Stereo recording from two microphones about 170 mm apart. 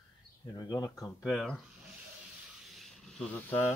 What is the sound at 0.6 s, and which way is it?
Speech, 20° left (ahead or behind).